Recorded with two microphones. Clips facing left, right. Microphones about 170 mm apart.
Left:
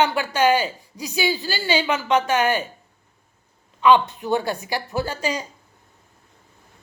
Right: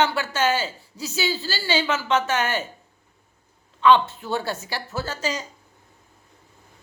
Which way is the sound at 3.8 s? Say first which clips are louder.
Left 1 dB; 15° left (ahead or behind).